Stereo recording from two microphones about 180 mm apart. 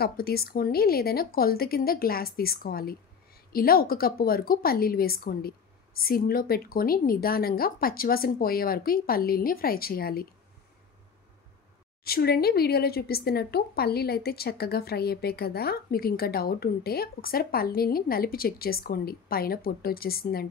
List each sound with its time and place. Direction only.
0.0 s speech: 60° left (ahead or behind)
12.0 s speech: 60° left (ahead or behind)